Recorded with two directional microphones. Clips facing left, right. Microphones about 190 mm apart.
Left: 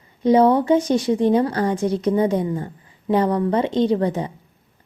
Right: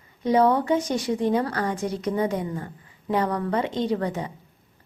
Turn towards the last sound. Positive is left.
turn(degrees=25)  # may be behind; listen again after turning